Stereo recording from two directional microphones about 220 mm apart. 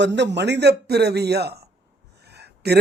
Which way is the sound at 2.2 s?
50° right (ahead or behind).